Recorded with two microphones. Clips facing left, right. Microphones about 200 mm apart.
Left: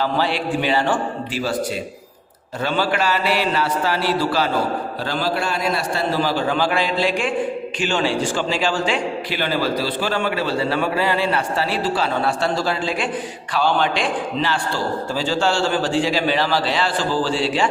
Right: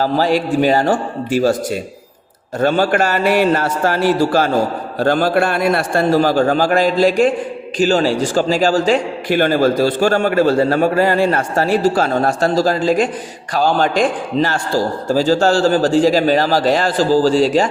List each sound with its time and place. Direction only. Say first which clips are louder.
0.0 s a man's voice: right 6 dB; 40° right (ahead or behind)
2.6 s a man's voice: right 7 dB; 45° right (ahead or behind)